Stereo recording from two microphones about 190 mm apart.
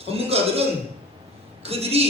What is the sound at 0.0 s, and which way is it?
Speech, 30° right (ahead or behind).